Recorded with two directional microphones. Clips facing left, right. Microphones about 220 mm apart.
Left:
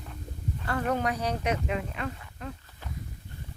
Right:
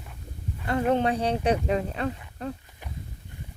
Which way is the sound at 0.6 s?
25° right (ahead or behind).